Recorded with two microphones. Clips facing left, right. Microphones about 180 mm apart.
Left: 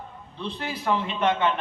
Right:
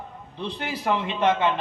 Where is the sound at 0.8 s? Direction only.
20° right (ahead or behind).